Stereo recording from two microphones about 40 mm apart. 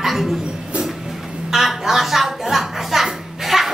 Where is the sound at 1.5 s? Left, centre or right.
Centre.